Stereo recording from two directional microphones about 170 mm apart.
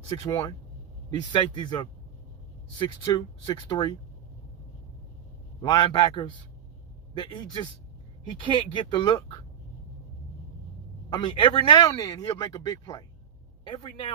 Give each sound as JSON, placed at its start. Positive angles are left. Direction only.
{"t": 0.2, "sound": "speech", "side_deg": 25}
{"t": 5.6, "sound": "speech", "side_deg": 25}
{"t": 11.1, "sound": "speech", "side_deg": 30}